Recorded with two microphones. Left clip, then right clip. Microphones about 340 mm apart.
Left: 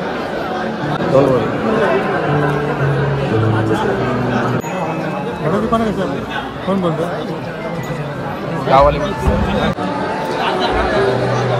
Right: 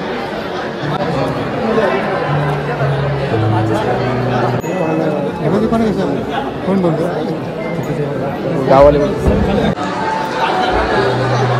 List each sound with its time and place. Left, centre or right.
8.6 s speech: centre